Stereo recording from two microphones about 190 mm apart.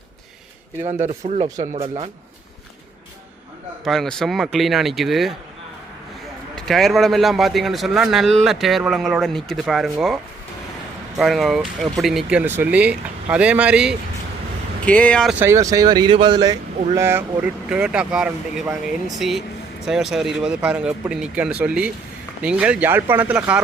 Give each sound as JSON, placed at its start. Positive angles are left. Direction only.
{"t": 1.0, "sound": "speech", "side_deg": -35}
{"t": 1.5, "sound": "speech", "side_deg": -20}
{"t": 1.7, "sound": "speech", "side_deg": -30}
{"t": 3.8, "sound": "speech", "side_deg": 0}
{"t": 6.6, "sound": "speech", "side_deg": 0}
{"t": 11.2, "sound": "speech", "side_deg": 0}
{"t": 14.8, "sound": "speech", "side_deg": 5}
{"t": 15.4, "sound": "speech", "side_deg": -15}